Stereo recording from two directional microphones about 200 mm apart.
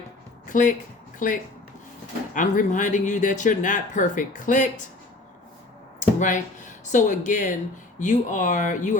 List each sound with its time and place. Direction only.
0.4 s speech: 40° left (ahead or behind)
6.0 s speech: 40° left (ahead or behind)